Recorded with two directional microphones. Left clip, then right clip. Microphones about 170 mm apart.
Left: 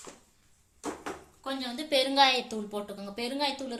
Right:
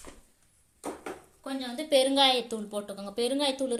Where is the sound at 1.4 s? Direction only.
10° right (ahead or behind).